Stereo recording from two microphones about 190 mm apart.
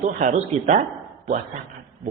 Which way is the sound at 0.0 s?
40° right (ahead or behind).